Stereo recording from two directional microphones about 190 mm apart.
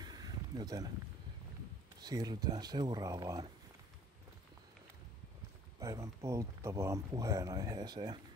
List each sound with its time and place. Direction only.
0.0 s a sound: 20° right (ahead or behind)
2.0 s speech: 20° right (ahead or behind)
5.8 s speech: 15° right (ahead or behind)